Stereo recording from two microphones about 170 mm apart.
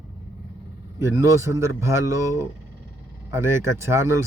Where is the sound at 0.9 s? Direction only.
15° right (ahead or behind).